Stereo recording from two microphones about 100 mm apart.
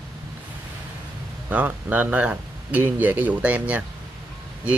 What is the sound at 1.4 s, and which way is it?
Speech, 15° right (ahead or behind).